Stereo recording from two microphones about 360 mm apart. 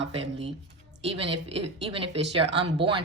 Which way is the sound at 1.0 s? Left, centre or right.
Centre.